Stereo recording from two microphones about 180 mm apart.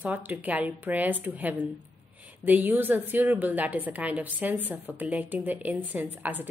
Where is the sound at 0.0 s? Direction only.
10° right (ahead or behind).